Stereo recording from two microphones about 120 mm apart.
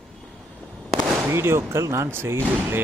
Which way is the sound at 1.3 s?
20° right (ahead or behind).